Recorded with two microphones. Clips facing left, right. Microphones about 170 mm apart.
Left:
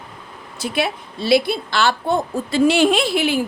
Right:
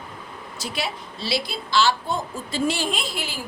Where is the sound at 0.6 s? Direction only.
55° left (ahead or behind).